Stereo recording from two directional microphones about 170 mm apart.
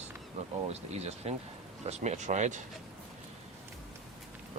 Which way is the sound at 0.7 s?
40° right (ahead or behind).